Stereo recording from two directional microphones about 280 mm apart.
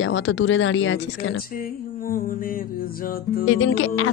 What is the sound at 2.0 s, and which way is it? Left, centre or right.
Speech, left.